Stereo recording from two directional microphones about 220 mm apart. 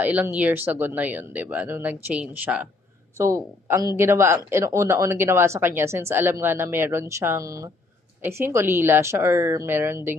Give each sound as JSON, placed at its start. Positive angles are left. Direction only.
{"t": 0.0, "sound": "speech", "side_deg": -5}